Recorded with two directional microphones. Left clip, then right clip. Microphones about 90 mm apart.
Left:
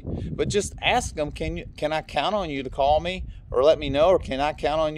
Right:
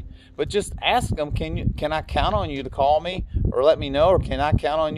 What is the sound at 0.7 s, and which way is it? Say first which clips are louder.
Speech: right 2 dB; 20° left (ahead or behind).